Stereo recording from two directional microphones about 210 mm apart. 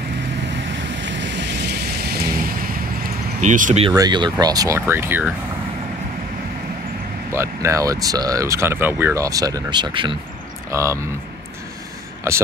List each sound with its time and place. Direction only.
0.5 s waves: 60° right (ahead or behind)
3.3 s speech: 35° right (ahead or behind)
3.8 s speech: 20° right (ahead or behind)
7.3 s speech: 15° right (ahead or behind)
12.3 s speech: 15° right (ahead or behind)